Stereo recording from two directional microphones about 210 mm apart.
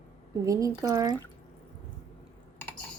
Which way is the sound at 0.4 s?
15° right (ahead or behind).